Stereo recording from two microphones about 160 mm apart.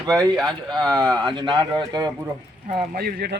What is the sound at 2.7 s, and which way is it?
Speech, 65° right (ahead or behind).